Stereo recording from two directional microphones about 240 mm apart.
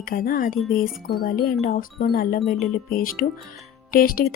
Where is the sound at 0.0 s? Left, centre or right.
Left.